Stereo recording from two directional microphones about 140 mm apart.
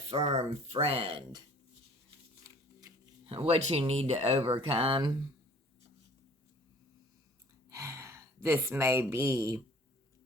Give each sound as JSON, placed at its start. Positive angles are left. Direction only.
{"t": 0.1, "sound": "speech", "side_deg": -45}
{"t": 2.4, "sound": "a sound", "side_deg": -25}
{"t": 3.2, "sound": "speech", "side_deg": -45}
{"t": 7.7, "sound": "a woman's voice", "side_deg": -20}